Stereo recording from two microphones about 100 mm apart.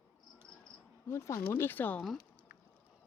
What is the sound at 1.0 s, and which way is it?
Speech, 30° left (ahead or behind).